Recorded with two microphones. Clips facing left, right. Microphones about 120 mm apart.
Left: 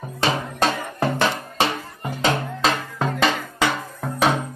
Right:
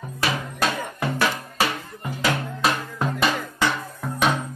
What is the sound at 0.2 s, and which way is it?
Music, 30° left (ahead or behind).